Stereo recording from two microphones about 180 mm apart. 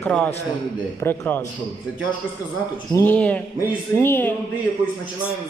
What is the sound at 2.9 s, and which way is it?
A man's voice, 10° left (ahead or behind).